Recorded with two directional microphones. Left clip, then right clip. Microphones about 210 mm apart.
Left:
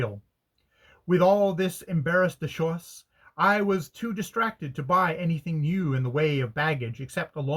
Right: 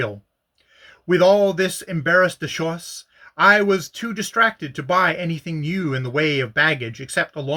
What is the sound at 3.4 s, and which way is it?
Speech, 15° right (ahead or behind).